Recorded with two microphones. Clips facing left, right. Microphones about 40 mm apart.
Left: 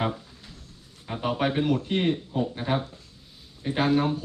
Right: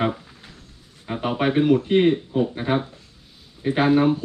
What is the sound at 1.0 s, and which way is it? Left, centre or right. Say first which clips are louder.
Speech: right 4 dB; centre.